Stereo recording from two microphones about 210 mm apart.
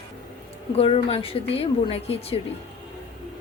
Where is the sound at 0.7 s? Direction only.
30° left (ahead or behind).